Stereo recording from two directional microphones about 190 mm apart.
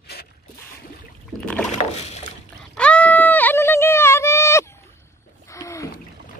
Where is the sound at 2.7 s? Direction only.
5° left (ahead or behind).